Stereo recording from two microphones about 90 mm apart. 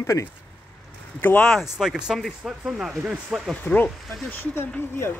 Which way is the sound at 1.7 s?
5° right (ahead or behind).